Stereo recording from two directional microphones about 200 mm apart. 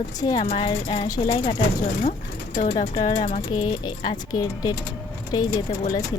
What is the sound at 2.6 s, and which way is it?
Speech, 40° left (ahead or behind).